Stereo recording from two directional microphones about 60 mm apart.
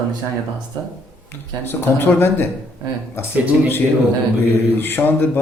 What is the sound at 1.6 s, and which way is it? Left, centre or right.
Speech, left.